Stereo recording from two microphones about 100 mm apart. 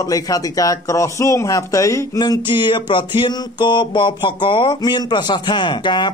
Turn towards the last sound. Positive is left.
turn(degrees=50)  # may be behind; listen again after turning